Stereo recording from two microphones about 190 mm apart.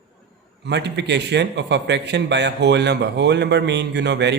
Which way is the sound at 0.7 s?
65° right (ahead or behind).